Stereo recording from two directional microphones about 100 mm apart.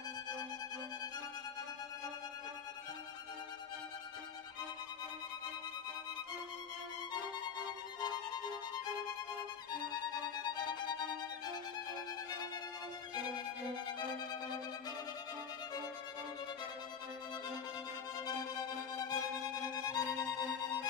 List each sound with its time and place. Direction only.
7.1 s music: 45° left (ahead or behind)
9.8 s violin: 45° left (ahead or behind)
13.1 s violin: 45° left (ahead or behind)
18.2 s music: 40° left (ahead or behind)